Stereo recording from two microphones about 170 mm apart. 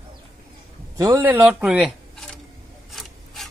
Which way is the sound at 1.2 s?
10° right (ahead or behind).